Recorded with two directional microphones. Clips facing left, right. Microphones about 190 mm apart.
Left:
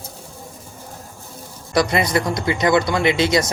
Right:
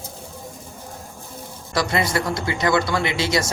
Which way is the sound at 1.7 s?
20° left (ahead or behind).